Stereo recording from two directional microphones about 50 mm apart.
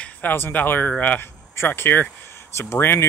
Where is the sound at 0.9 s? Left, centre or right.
Left.